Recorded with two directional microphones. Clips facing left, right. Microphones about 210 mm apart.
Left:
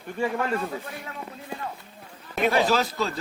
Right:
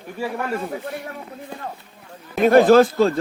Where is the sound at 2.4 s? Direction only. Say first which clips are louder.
Right 10 dB; 50° right (ahead or behind).